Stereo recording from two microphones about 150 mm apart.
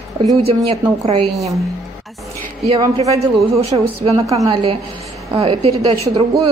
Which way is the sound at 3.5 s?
45° right (ahead or behind).